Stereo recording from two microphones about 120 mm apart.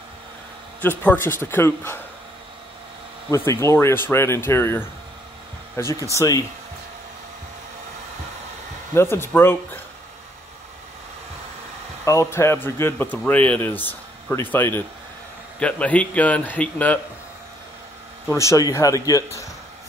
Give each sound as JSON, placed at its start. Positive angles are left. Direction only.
{"t": 0.8, "sound": "speech", "side_deg": 15}
{"t": 3.3, "sound": "speech", "side_deg": 25}
{"t": 8.9, "sound": "speech", "side_deg": 20}
{"t": 12.0, "sound": "a man's voice", "side_deg": 25}
{"t": 18.3, "sound": "speech", "side_deg": 25}